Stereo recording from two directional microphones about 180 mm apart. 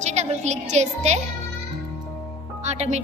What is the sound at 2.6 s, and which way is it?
Speech, 40° right (ahead or behind).